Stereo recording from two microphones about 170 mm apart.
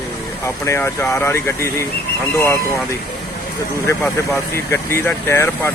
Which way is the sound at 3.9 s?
10° left (ahead or behind).